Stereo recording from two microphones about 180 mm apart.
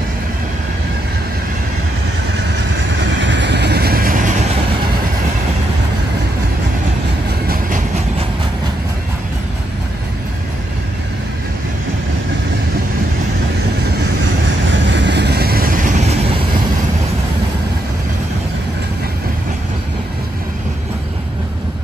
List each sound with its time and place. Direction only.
3.0 s vehicle: 90° right; by 4.5 s 45° right (ahead or behind)
14.7 s vehicle: 80° right; by 16.2 s 40° right (ahead or behind)